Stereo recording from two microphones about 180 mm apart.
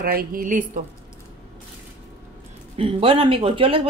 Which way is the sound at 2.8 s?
30° right (ahead or behind).